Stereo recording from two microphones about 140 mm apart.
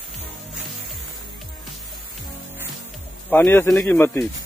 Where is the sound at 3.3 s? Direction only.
15° left (ahead or behind).